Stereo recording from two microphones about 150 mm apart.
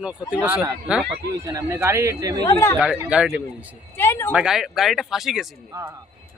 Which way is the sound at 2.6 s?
15° left (ahead or behind).